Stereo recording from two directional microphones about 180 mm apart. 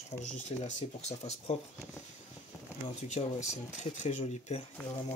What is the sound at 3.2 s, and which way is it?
Speech, 35° left (ahead or behind).